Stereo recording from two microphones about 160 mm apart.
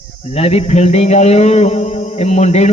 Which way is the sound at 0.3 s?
40° left (ahead or behind).